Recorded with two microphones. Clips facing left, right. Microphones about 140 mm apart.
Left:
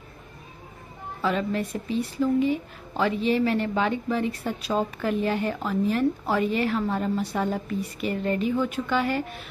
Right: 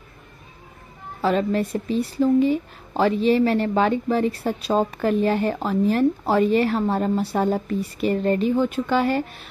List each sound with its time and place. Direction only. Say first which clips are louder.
1.2 s a woman's voice: right 5 dB; 35° right (ahead or behind)